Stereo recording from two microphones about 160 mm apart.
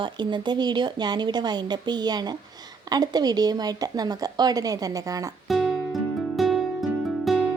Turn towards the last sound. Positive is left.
turn(degrees=0)  # may be behind; listen again after turning